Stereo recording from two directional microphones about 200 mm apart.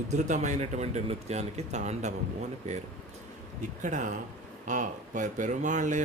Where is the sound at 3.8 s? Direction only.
40° right (ahead or behind).